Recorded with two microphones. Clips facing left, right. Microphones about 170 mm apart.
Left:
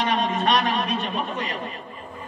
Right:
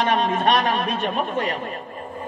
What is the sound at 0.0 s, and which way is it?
A man's voice, 50° right (ahead or behind).